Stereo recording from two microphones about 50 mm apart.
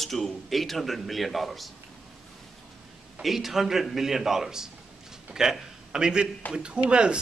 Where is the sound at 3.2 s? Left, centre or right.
Centre.